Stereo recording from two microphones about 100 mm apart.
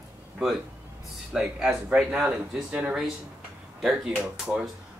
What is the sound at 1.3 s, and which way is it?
Speech, 5° right (ahead or behind).